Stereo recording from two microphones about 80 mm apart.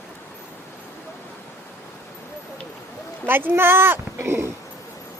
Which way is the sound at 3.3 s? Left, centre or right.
Right.